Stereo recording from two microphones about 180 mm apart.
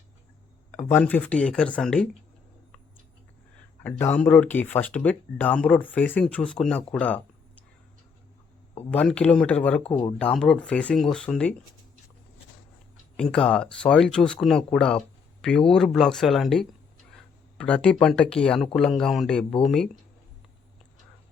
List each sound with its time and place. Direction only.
0.7 s speech: 10° left (ahead or behind)
3.8 s speech: 10° left (ahead or behind)
7.0 s a sound: 10° left (ahead or behind)
8.9 s speech: 5° left (ahead or behind)
13.1 s speech: 5° left (ahead or behind)